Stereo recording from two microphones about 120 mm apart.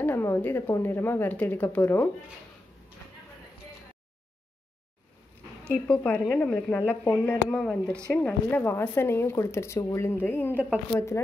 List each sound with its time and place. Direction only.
0.0 s a woman's voice: 20° left (ahead or behind)
5.7 s a woman's voice: 10° left (ahead or behind)
7.4 s speech: centre (ahead or behind)
8.1 s speech: 10° left (ahead or behind)